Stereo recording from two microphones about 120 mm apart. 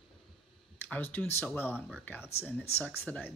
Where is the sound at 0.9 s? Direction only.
15° left (ahead or behind).